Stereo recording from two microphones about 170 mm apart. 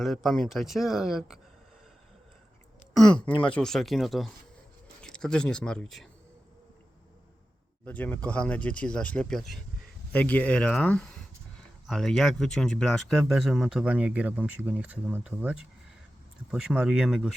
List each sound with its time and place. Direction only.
0.0 s speech: centre (ahead or behind)
3.0 s speech: 25° left (ahead or behind)
3.4 s speech: 5° left (ahead or behind)
7.9 s speech: 10° left (ahead or behind)